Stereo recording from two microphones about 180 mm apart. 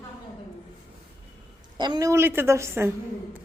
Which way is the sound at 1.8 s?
20° right (ahead or behind).